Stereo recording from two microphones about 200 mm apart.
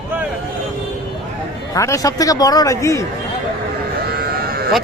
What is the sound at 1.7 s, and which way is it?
A man's voice, 15° left (ahead or behind).